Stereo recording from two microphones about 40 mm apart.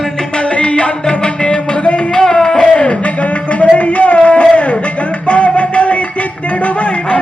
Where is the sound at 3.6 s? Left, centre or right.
Left.